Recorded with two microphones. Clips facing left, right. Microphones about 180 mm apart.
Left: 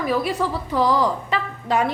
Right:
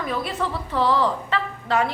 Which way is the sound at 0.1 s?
10° left (ahead or behind).